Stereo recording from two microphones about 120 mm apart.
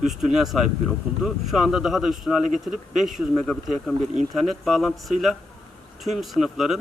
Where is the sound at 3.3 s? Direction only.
10° left (ahead or behind).